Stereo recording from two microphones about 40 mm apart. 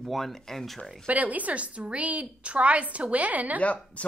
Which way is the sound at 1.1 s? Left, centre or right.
Right.